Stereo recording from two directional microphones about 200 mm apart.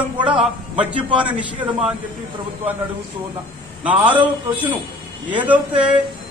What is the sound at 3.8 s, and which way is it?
Speech, 5° right (ahead or behind).